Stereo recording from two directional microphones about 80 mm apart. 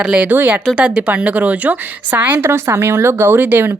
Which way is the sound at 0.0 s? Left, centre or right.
Centre.